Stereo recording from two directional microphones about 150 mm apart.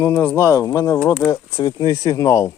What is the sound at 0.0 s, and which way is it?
Speech, 15° left (ahead or behind).